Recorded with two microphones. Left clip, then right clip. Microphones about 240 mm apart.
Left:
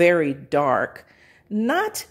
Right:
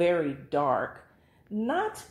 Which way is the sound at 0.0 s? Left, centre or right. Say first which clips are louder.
Left 8 dB; left.